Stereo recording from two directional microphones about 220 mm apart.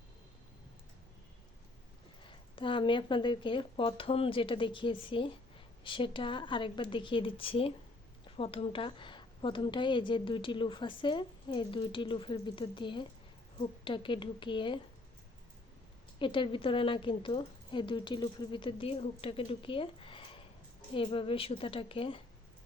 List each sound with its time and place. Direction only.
2.2 s a woman's voice: 25° left (ahead or behind)
16.1 s a woman's voice: 20° left (ahead or behind)